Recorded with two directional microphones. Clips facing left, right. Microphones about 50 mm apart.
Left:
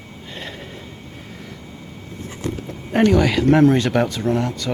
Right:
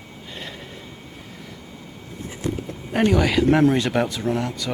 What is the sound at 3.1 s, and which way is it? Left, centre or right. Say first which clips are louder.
Speech: even; centre.